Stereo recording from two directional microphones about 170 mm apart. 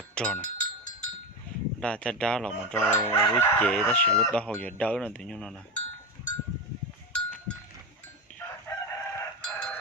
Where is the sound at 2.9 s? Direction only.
20° left (ahead or behind).